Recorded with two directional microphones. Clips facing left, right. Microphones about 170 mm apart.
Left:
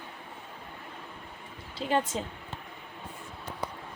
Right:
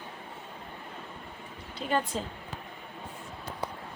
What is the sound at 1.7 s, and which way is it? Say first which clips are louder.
Speech: left 1 dB; 25° left (ahead or behind).